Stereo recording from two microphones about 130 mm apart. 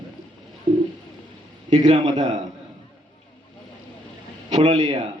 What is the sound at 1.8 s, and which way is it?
Speech, 65° right (ahead or behind).